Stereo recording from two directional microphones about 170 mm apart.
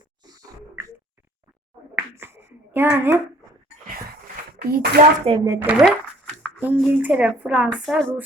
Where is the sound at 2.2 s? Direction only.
15° right (ahead or behind).